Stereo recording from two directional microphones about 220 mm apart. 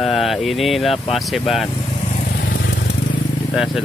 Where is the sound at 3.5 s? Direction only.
Centre (ahead or behind).